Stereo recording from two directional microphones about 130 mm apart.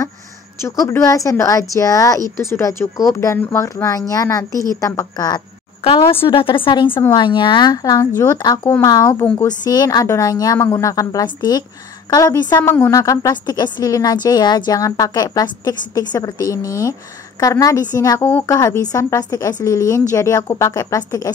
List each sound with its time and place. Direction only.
0.6 s a woman's voice: 20° left (ahead or behind)
5.9 s a woman's voice: 40° left (ahead or behind)
7.0 s a woman's voice: 25° left (ahead or behind)
7.2 s a woman's voice: 35° left (ahead or behind)
12.5 s a woman's voice: 15° left (ahead or behind)